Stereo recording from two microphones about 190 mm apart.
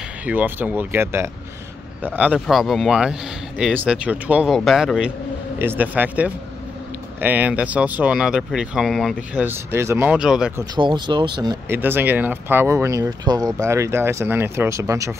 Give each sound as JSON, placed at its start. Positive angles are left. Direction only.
{"t": 0.2, "sound": "speech", "side_deg": -10}
{"t": 10.6, "sound": "speech", "side_deg": -25}
{"t": 11.7, "sound": "speech", "side_deg": -10}